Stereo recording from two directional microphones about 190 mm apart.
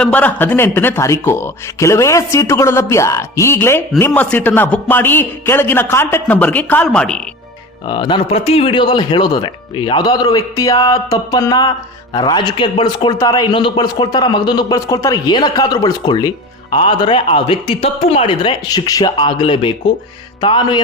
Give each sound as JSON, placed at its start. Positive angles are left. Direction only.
{"t": 0.0, "sound": "speech", "side_deg": 10}
{"t": 7.9, "sound": "a man's voice", "side_deg": 25}